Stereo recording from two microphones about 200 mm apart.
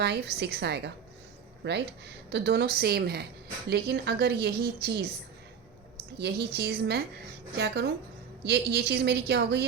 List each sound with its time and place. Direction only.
0.0 s a woman's voice: 55° right (ahead or behind)
6.1 s a woman's voice: 55° right (ahead or behind)